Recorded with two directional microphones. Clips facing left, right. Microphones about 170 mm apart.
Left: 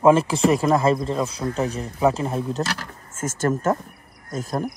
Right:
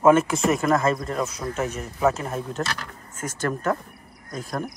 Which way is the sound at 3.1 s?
45° left (ahead or behind).